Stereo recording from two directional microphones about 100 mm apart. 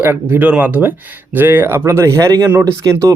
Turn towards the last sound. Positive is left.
turn(degrees=-35)  # may be behind; listen again after turning